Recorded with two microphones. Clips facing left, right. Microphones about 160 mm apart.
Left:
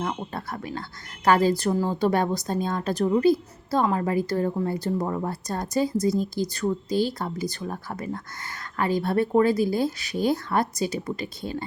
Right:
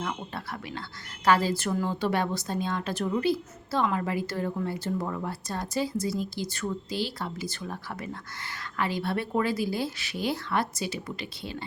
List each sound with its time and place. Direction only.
0.0 s a woman's voice: 45° left (ahead or behind)